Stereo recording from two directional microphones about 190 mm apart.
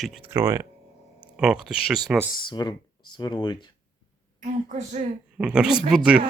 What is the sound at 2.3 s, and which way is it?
Speech, 20° left (ahead or behind).